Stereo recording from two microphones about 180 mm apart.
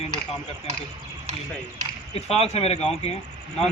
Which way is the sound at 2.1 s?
35° left (ahead or behind).